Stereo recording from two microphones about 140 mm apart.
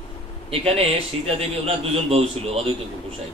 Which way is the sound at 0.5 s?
45° right (ahead or behind).